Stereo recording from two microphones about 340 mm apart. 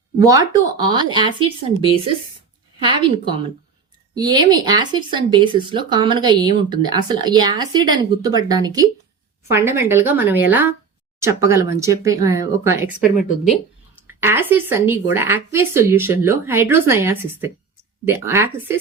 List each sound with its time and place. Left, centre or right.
0.3 s speech: centre
2.7 s speech: centre